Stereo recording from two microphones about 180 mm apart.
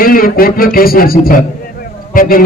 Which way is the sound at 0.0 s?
55° left (ahead or behind).